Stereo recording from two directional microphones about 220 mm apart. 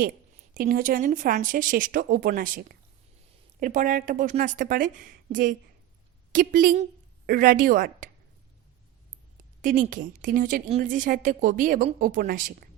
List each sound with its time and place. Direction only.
0.5 s a woman's voice: 40° right (ahead or behind)
9.6 s a woman's voice: 35° right (ahead or behind)